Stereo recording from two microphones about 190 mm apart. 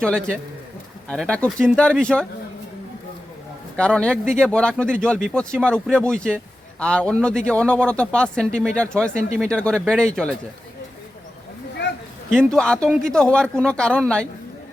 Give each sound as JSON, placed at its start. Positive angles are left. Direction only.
{"t": 0.0, "sound": "a man's voice", "side_deg": 5}
{"t": 3.8, "sound": "a man's voice", "side_deg": 5}
{"t": 11.8, "sound": "a sound", "side_deg": 70}
{"t": 12.3, "sound": "a man's voice", "side_deg": 5}